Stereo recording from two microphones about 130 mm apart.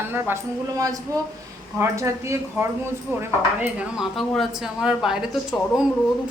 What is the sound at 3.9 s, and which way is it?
A woman's voice, centre (ahead or behind).